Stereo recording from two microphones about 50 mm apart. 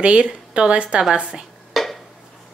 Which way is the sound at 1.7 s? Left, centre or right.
Centre.